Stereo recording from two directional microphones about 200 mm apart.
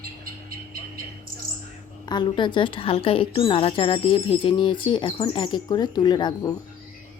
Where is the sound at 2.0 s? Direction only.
25° left (ahead or behind).